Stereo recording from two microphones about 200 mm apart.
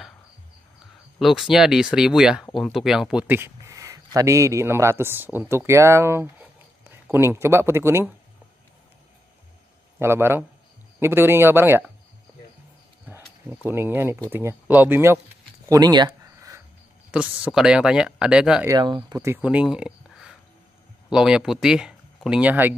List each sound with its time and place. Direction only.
1.2 s speech: centre (ahead or behind)
9.9 s speech: 10° right (ahead or behind)
13.0 s a sound: 5° right (ahead or behind)
13.7 s speech: 10° right (ahead or behind)
15.7 s a sound: 20° right (ahead or behind)
17.1 s speech: 5° right (ahead or behind)
18.7 s speech: 20° right (ahead or behind)